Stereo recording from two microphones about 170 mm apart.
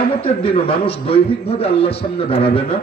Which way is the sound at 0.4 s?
35° left (ahead or behind).